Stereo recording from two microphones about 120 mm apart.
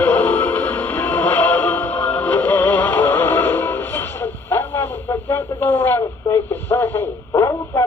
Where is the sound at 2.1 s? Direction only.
15° left (ahead or behind).